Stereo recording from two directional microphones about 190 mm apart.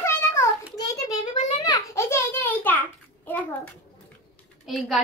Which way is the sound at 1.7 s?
15° left (ahead or behind).